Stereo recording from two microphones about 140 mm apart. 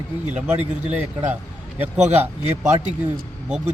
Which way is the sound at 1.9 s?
55° right (ahead or behind).